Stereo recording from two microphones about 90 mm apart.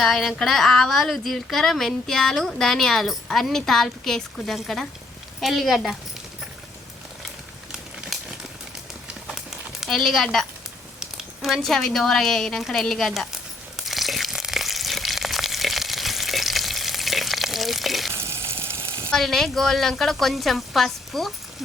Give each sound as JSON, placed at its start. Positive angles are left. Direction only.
{"t": 0.0, "sound": "speech", "side_deg": 5}
{"t": 9.8, "sound": "speech", "side_deg": 5}
{"t": 11.4, "sound": "speech", "side_deg": 5}
{"t": 13.7, "sound": "frying", "side_deg": 0}
{"t": 18.1, "sound": "frying", "side_deg": -30}
{"t": 19.1, "sound": "speech", "side_deg": 5}